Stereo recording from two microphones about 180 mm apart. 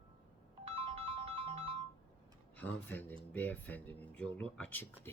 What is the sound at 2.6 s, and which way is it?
Speech, 10° left (ahead or behind).